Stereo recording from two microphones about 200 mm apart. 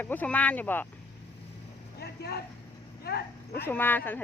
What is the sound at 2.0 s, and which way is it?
Vehicle, 55° left (ahead or behind).